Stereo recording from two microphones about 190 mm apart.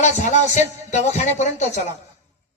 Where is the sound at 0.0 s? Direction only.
40° left (ahead or behind).